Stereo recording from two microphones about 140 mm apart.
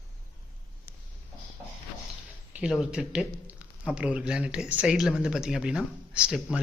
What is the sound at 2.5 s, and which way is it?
Speech, 5° right (ahead or behind).